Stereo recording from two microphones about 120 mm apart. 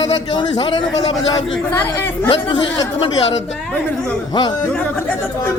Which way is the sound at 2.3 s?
45° left (ahead or behind).